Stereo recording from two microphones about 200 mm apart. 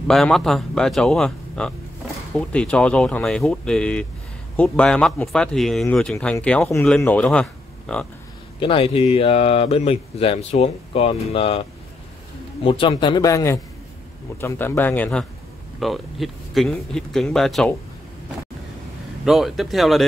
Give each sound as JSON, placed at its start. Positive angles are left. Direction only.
{"t": 0.1, "sound": "speech", "side_deg": 0}
{"t": 8.5, "sound": "speech", "side_deg": 25}
{"t": 12.6, "sound": "a man's voice", "side_deg": 25}
{"t": 19.2, "sound": "speech", "side_deg": 0}